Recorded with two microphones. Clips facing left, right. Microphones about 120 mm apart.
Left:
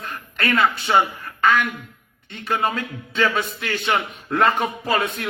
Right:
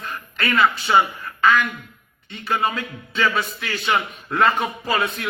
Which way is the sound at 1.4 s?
55° left (ahead or behind).